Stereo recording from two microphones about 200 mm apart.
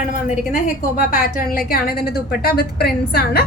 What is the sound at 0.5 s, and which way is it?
Speech, 45° left (ahead or behind).